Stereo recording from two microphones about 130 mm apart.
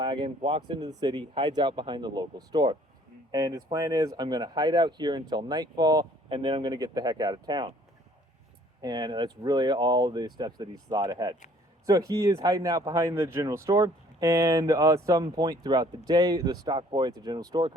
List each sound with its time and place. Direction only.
0.0 s speech: 35° right (ahead or behind)
8.8 s speech: 35° right (ahead or behind)